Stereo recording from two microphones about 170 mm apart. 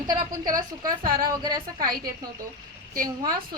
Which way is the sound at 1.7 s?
55° right (ahead or behind).